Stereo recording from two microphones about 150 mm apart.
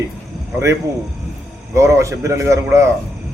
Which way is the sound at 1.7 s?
20° right (ahead or behind).